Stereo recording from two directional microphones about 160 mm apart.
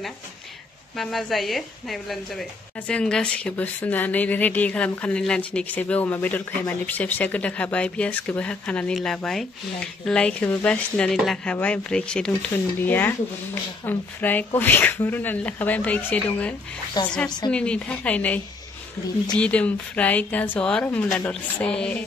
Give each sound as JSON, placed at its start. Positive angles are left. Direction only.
{"t": 0.9, "sound": "a woman's voice", "side_deg": 0}
{"t": 17.0, "sound": "a woman's voice", "side_deg": 25}
{"t": 17.5, "sound": "speech", "side_deg": 5}